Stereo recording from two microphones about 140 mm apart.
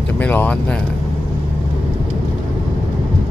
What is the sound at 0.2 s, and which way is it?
Speech, 10° left (ahead or behind).